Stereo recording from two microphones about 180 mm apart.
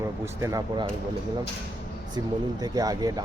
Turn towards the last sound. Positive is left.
turn(degrees=-20)  # may be behind; listen again after turning